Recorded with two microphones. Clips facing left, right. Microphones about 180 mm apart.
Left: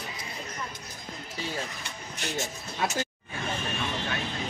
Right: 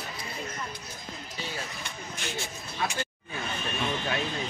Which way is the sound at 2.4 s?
45° left (ahead or behind).